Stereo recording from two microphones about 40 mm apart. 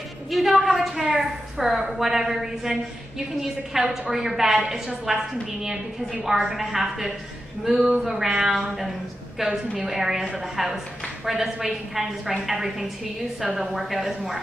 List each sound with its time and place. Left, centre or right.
0.3 s a woman's voice: centre
8.3 s a woman's voice: centre
8.5 s a woman's voice: centre